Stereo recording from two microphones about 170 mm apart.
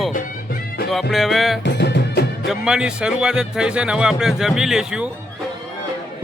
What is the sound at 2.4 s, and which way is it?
Music, 5° right (ahead or behind).